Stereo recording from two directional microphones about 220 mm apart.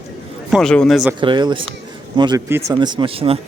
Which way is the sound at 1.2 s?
20° right (ahead or behind).